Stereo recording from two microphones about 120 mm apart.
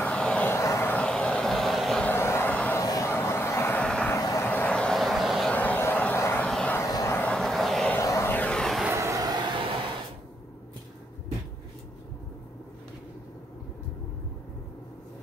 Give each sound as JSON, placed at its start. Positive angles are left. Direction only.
{"t": 0.0, "sound": "vehicle", "side_deg": 10}
{"t": 0.6, "sound": "vehicle", "side_deg": 20}
{"t": 2.0, "sound": "vehicle", "side_deg": 20}
{"t": 2.8, "sound": "a sound", "side_deg": 25}
{"t": 3.8, "sound": "vehicle", "side_deg": 5}
{"t": 5.5, "sound": "a sound", "side_deg": 15}
{"t": 6.4, "sound": "vehicle", "side_deg": 10}
{"t": 6.8, "sound": "vehicle", "side_deg": 25}
{"t": 7.2, "sound": "vehicle", "side_deg": 5}
{"t": 7.9, "sound": "vehicle", "side_deg": 25}
{"t": 8.9, "sound": "vehicle", "side_deg": -25}